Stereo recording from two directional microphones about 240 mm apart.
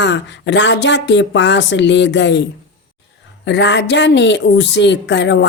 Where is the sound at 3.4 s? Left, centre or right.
Left.